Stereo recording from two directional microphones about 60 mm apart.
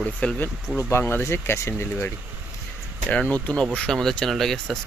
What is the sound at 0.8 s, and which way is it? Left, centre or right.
Speech, left.